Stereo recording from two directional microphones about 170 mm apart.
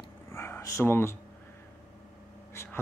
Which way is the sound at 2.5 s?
15° left (ahead or behind).